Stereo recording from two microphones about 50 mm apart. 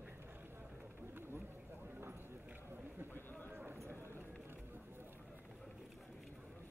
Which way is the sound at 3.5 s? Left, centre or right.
Right.